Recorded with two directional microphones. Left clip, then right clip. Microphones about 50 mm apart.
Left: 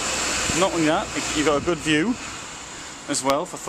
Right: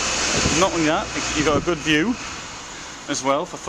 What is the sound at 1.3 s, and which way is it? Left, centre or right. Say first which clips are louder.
Speech: right 1 dB; centre.